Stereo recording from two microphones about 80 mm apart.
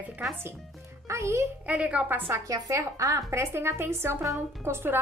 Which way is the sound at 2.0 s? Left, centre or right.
Right.